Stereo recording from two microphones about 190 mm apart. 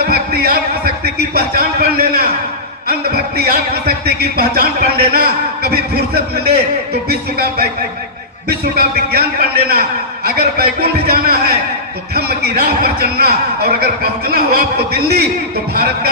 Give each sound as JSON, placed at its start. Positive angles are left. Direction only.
{"t": 0.1, "sound": "a sound", "side_deg": -55}
{"t": 2.8, "sound": "a man's voice", "side_deg": -55}
{"t": 10.2, "sound": "a man's voice", "side_deg": -55}